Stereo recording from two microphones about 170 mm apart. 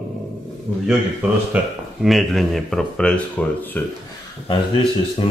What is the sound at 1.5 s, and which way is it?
Speech, centre (ahead or behind).